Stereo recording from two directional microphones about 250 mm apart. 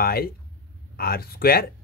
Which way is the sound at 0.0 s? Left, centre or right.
Left.